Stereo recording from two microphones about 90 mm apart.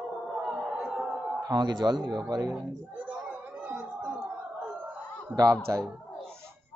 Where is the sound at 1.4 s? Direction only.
50° right (ahead or behind).